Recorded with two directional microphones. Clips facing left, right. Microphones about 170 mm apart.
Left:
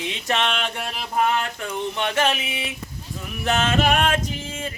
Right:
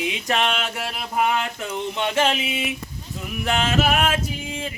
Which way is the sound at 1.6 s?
15° right (ahead or behind).